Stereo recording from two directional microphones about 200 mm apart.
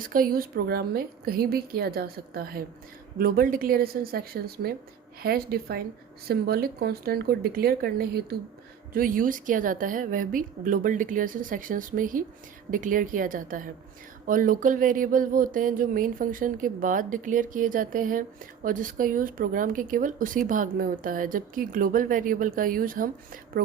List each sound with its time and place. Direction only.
0.0 s speech: 45° right (ahead or behind)